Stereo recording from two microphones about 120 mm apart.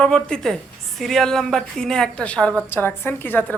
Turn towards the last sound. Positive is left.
turn(degrees=15)  # may be behind; listen again after turning